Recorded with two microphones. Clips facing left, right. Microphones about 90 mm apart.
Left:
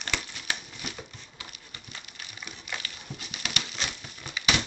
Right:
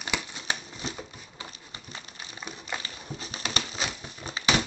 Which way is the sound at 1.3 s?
30° right (ahead or behind).